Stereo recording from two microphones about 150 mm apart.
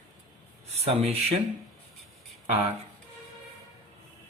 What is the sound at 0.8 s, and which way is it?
Speech, 45° right (ahead or behind).